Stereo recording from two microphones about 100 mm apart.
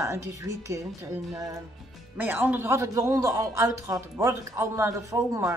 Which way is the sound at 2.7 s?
30° right (ahead or behind).